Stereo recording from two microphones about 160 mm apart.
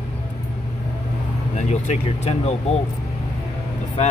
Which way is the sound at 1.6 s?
45° left (ahead or behind).